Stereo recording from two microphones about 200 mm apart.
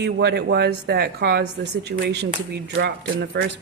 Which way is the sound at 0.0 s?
55° right (ahead or behind).